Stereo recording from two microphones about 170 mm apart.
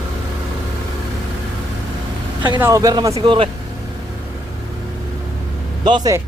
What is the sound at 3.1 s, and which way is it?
Speech, 30° right (ahead or behind).